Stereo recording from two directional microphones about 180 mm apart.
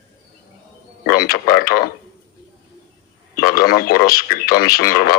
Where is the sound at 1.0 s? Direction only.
55° left (ahead or behind).